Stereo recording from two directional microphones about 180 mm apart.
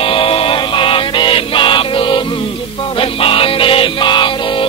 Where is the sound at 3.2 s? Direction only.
30° left (ahead or behind).